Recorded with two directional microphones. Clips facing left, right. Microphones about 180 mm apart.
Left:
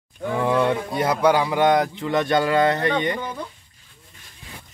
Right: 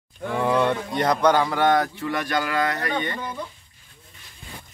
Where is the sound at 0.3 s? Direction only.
Centre (ahead or behind); by 3.3 s 20° left (ahead or behind).